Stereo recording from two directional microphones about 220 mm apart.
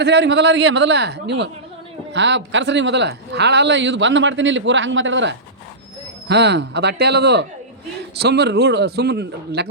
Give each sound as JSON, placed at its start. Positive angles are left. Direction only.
{"t": 0.0, "sound": "a man's voice", "side_deg": -50}